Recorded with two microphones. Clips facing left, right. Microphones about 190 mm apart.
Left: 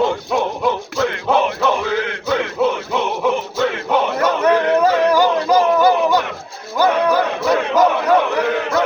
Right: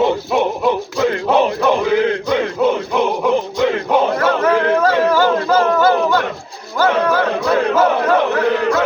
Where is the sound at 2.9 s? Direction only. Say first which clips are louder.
Right 2 dB; 5° left (ahead or behind).